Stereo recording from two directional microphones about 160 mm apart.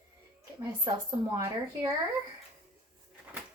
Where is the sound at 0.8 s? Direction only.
25° right (ahead or behind).